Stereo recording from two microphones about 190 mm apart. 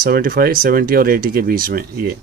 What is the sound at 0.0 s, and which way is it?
Speech, 50° right (ahead or behind).